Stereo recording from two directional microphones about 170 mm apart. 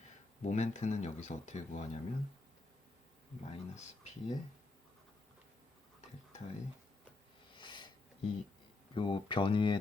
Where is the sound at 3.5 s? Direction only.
40° left (ahead or behind).